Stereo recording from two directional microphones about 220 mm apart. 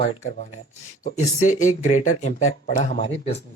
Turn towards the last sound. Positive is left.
turn(degrees=30)  # may be behind; listen again after turning